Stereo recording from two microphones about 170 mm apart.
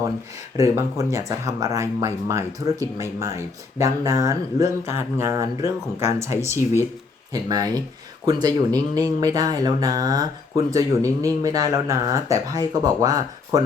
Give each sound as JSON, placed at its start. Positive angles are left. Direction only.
{"t": 0.5, "sound": "speech", "side_deg": -15}